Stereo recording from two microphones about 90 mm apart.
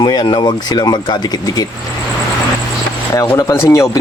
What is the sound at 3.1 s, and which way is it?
Speech, 35° left (ahead or behind).